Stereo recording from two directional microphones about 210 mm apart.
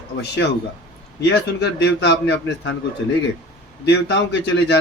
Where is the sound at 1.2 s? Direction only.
55° left (ahead or behind).